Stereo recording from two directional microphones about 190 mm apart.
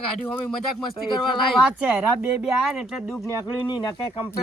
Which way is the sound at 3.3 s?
20° left (ahead or behind).